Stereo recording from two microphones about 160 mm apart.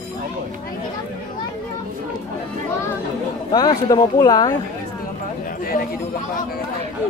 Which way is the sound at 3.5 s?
25° left (ahead or behind).